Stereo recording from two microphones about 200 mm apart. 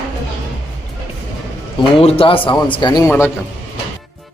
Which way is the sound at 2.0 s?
30° left (ahead or behind).